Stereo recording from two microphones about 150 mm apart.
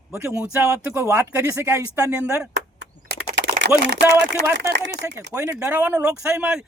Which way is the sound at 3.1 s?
90° right.